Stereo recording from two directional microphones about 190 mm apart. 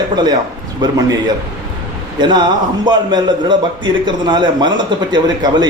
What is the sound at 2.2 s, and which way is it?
A man's voice, 25° right (ahead or behind).